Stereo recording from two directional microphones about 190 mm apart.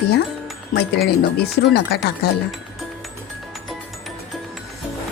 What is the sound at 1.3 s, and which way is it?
Speech, 60° left (ahead or behind).